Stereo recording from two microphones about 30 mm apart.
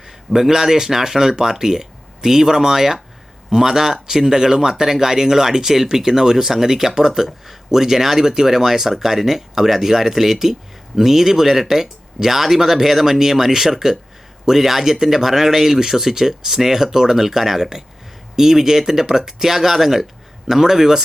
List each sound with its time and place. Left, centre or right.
0.3 s speech: centre